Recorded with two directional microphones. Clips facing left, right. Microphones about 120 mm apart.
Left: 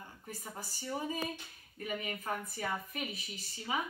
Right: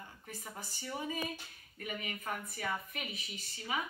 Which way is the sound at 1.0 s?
35° left (ahead or behind).